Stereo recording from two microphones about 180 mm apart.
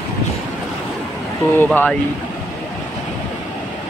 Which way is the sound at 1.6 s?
5° left (ahead or behind).